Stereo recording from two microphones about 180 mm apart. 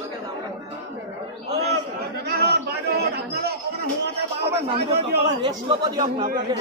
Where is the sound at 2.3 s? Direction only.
65° right (ahead or behind).